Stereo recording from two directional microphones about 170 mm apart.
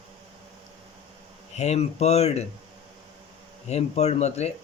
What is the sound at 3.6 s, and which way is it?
Speech, 40° left (ahead or behind).